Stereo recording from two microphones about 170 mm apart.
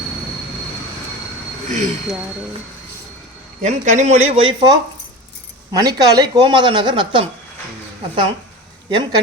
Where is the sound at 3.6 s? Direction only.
45° right (ahead or behind).